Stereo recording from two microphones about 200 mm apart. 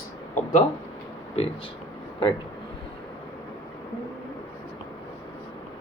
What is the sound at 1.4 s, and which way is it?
Speech, 30° left (ahead or behind).